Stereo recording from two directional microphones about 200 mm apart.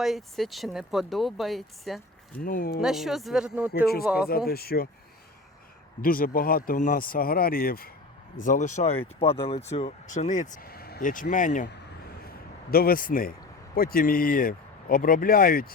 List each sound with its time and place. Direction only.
0.0 s speech: centre (ahead or behind)
2.4 s speech: 45° left (ahead or behind)
2.8 s speech: centre (ahead or behind)
4.3 s speech: 50° left (ahead or behind)
6.0 s speech: 45° left (ahead or behind)
12.7 s speech: 45° left (ahead or behind)